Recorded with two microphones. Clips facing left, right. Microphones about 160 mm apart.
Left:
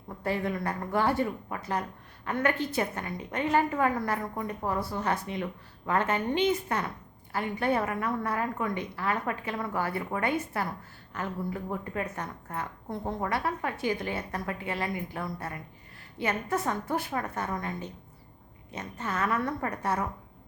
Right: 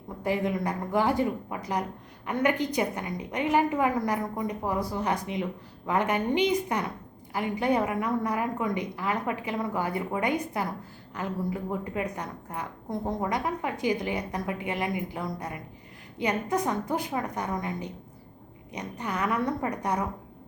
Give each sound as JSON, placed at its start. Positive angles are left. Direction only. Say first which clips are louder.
{"t": 0.2, "sound": "speech", "louder": "right 3 dB", "side_deg": -15}